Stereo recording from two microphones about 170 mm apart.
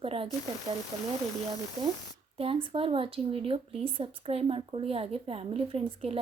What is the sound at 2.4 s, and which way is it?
Speech, 35° right (ahead or behind).